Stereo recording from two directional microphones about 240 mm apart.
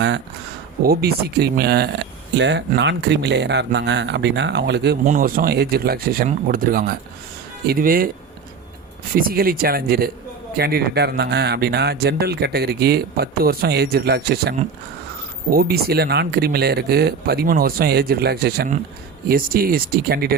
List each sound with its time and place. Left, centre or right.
0.8 s speech: right
5.0 s speech: right
9.1 s speech: right